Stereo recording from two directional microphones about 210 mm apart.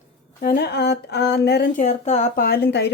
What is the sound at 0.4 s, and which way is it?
Speech, 50° left (ahead or behind).